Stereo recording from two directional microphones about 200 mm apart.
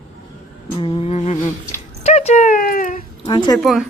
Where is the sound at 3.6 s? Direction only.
Centre (ahead or behind).